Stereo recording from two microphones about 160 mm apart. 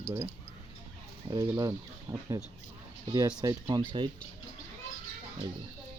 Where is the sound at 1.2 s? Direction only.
25° right (ahead or behind).